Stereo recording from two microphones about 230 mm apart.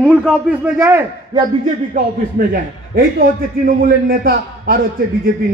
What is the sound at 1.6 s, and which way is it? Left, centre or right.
A man's voice, right.